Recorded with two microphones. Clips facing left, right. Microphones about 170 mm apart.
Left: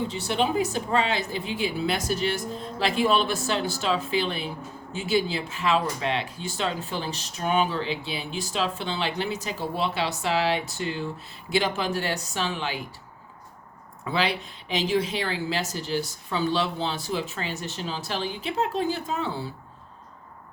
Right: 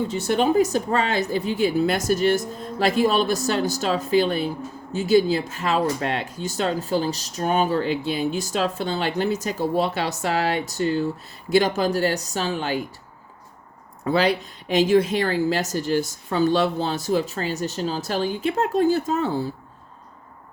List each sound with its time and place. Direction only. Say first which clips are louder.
0.1 s speech: right 5 dB; 45° right (ahead or behind)
14.0 s speech: right 6 dB; 45° right (ahead or behind)